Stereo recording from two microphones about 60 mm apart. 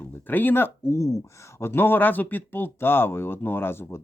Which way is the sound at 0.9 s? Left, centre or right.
Left.